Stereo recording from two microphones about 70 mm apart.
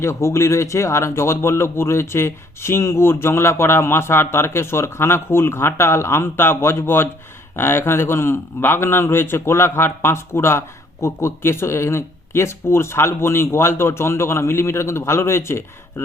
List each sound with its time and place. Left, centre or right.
0.0 s speech: left